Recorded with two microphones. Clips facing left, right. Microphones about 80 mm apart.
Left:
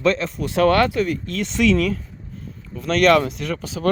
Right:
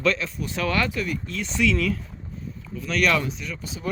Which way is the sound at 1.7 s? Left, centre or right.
Left.